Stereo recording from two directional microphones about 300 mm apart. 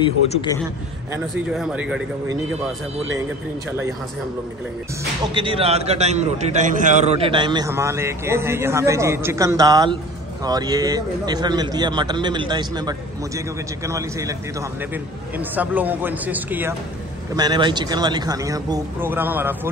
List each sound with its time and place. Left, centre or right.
0.0 s speech: centre
1.1 s speech: centre
5.3 s a man's voice: centre